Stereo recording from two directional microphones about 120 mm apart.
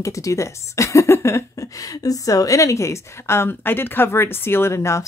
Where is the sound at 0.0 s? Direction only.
25° left (ahead or behind).